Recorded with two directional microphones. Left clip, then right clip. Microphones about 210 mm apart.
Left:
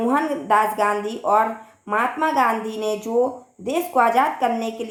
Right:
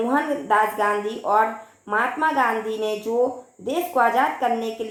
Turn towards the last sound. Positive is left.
turn(degrees=45)  # may be behind; listen again after turning